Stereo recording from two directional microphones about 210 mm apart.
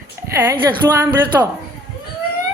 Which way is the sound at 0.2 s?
10° right (ahead or behind).